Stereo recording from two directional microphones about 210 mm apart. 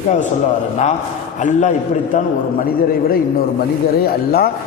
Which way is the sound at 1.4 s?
35° left (ahead or behind).